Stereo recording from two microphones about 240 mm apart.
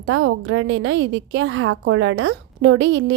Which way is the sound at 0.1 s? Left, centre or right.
Right.